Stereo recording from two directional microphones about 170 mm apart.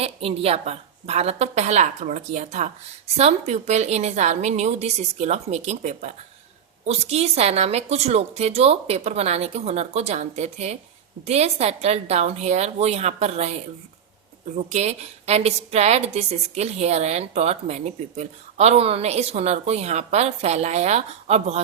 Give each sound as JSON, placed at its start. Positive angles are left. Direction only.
{"t": 0.0, "sound": "a woman's voice", "side_deg": -35}
{"t": 14.5, "sound": "a woman's voice", "side_deg": -40}